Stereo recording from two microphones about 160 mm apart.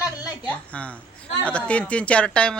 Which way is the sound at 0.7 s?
10° left (ahead or behind).